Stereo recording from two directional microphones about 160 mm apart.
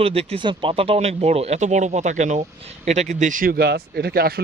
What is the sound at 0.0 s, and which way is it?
Speech, 40° right (ahead or behind).